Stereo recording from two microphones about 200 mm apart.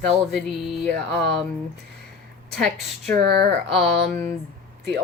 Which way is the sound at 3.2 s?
50° right (ahead or behind).